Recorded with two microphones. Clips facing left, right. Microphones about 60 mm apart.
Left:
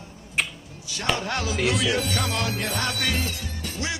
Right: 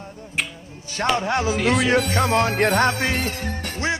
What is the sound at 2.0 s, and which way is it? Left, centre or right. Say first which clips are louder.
Speech: right 7 dB; right.